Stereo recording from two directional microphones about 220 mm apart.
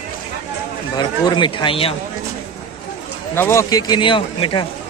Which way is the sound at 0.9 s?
20° left (ahead or behind).